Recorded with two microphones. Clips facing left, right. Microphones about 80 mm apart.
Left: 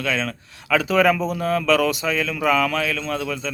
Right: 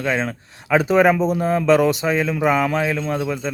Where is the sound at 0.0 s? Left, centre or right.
Right.